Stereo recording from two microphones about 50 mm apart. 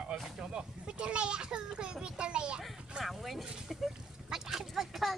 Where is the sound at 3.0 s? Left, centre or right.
Centre.